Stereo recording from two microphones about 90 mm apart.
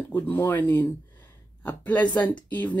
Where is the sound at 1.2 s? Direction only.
20° left (ahead or behind).